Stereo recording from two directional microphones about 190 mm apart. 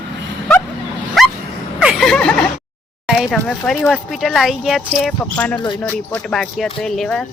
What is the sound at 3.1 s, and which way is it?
Speech, centre (ahead or behind).